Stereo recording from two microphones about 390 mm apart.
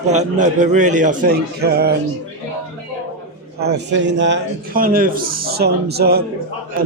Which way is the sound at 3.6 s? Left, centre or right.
Right.